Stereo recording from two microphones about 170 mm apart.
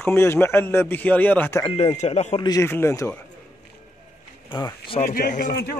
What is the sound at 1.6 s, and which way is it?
Speech, 35° left (ahead or behind).